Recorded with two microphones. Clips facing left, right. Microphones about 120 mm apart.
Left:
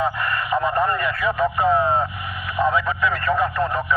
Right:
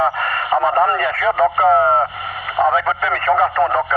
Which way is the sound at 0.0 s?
35° right (ahead or behind).